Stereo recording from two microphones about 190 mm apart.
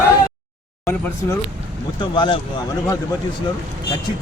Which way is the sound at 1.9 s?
25° left (ahead or behind).